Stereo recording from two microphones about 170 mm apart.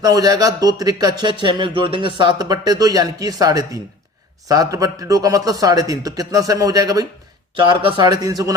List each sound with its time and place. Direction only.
0.0 s speech: 20° right (ahead or behind)